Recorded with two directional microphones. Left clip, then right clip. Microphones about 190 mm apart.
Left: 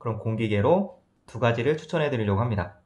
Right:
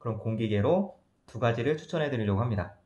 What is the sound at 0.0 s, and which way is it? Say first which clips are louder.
Speech: left 4 dB; 15° left (ahead or behind).